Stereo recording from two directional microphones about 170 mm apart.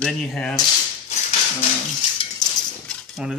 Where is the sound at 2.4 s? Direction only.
25° left (ahead or behind).